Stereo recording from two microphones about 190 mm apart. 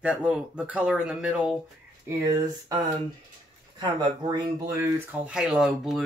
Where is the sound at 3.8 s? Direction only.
25° right (ahead or behind).